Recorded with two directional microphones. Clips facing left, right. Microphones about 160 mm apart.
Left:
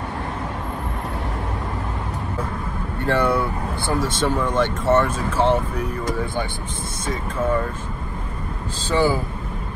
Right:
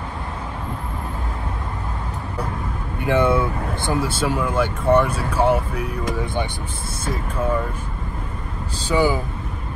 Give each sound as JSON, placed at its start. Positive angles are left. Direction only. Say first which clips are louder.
{"t": 3.0, "sound": "speech", "louder": "right 2 dB", "side_deg": -20}
{"t": 4.2, "sound": "speech", "louder": "left 1 dB", "side_deg": -10}
{"t": 7.1, "sound": "speech", "louder": "even", "side_deg": -5}
{"t": 8.8, "sound": "speech", "louder": "even", "side_deg": -15}